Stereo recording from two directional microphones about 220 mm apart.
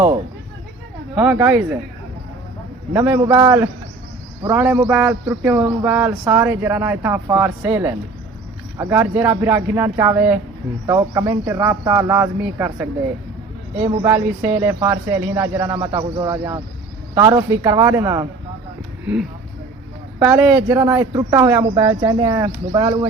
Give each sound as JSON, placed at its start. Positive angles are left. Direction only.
{"t": 1.1, "sound": "speech", "side_deg": -5}
{"t": 2.9, "sound": "speech", "side_deg": -10}
{"t": 14.0, "sound": "speech", "side_deg": -10}
{"t": 20.1, "sound": "speech", "side_deg": -5}